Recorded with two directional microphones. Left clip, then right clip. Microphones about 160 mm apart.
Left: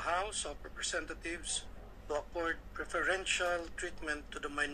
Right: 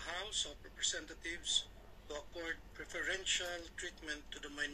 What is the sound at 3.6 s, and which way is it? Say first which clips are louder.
Speech: left 5 dB; 45° left (ahead or behind).